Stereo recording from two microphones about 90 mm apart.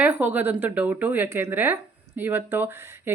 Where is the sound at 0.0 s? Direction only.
20° right (ahead or behind).